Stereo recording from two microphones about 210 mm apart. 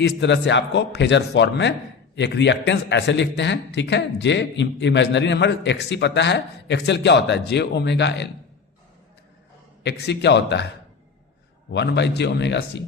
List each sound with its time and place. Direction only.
0.0 s a man's voice: 55° left (ahead or behind)
9.8 s a man's voice: 55° left (ahead or behind)
11.7 s a man's voice: 55° left (ahead or behind)